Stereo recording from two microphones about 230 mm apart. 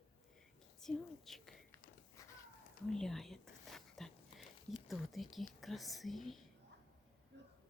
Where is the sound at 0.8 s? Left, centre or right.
Centre.